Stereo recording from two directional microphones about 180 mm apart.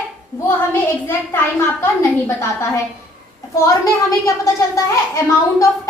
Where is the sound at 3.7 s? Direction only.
15° left (ahead or behind).